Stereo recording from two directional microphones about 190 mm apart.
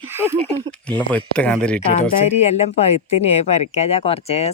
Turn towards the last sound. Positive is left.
turn(degrees=30)  # may be behind; listen again after turning